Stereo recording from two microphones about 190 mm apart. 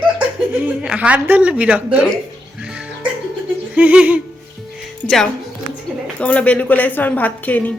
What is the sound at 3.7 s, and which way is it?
Speech, 5° right (ahead or behind).